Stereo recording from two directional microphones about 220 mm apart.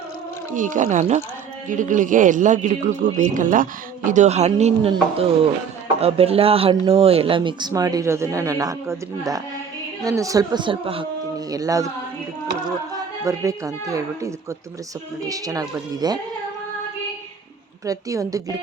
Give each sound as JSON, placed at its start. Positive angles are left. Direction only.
{"t": 0.5, "sound": "a man's voice", "side_deg": -35}
{"t": 17.8, "sound": "speech", "side_deg": -15}